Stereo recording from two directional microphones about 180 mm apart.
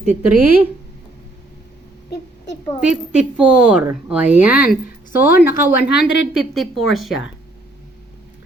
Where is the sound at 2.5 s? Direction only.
75° left (ahead or behind).